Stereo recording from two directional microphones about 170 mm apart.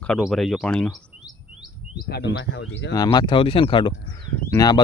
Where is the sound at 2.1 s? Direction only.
85° left.